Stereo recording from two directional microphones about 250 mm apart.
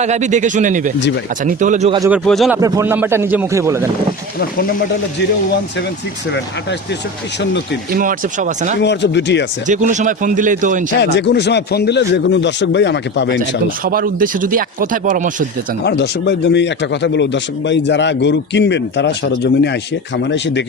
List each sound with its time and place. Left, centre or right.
0.0 s speech: right
0.9 s a man's voice: left
1.5 s speech: right
2.0 s speech: centre
2.6 s speech: centre
4.4 s speech: left
7.9 s speech: right
8.8 s a man's voice: left
9.6 s speech: right
11.0 s a man's voice: left
13.8 s speech: right
15.8 s a man's voice: left